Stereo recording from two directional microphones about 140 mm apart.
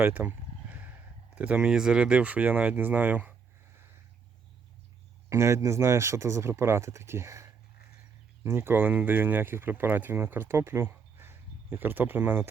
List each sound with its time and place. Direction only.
0.0 s a sound: 15° right (ahead or behind)
1.4 s speech: 10° right (ahead or behind)
5.3 s speech: 20° right (ahead or behind)